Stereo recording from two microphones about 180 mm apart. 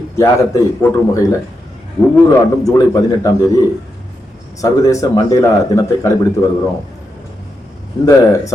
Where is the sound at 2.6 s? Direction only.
20° left (ahead or behind).